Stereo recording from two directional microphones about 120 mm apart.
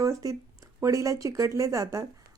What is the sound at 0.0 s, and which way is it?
Speech, 30° right (ahead or behind).